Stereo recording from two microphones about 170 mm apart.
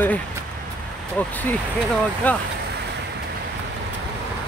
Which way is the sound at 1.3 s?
10° left (ahead or behind).